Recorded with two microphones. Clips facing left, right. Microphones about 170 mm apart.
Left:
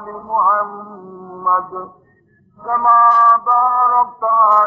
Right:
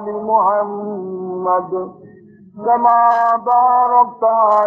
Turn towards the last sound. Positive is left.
turn(degrees=-35)  # may be behind; listen again after turning